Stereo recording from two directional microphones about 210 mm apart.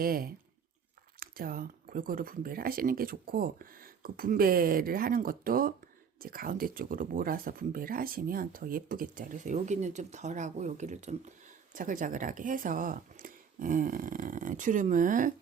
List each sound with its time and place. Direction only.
0.0 s speech: 45° right (ahead or behind)